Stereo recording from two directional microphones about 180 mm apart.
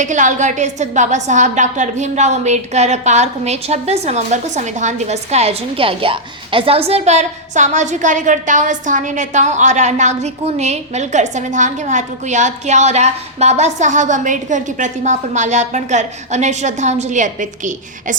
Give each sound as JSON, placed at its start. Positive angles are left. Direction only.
{"t": 0.0, "sound": "a woman's voice", "side_deg": -45}